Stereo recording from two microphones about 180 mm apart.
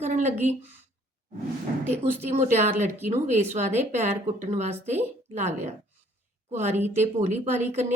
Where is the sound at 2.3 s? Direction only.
40° right (ahead or behind).